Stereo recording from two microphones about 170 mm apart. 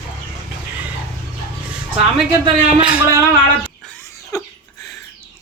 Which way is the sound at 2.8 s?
10° right (ahead or behind).